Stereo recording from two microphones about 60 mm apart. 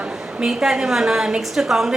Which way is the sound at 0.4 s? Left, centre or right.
Centre.